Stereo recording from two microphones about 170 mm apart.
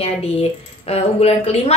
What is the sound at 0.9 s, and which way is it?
Speech, 40° left (ahead or behind).